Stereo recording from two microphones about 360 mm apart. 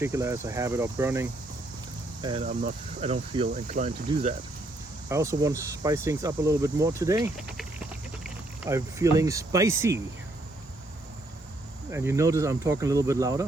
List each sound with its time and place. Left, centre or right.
0.0 s speech: centre
2.2 s speech: centre
11.9 s speech: centre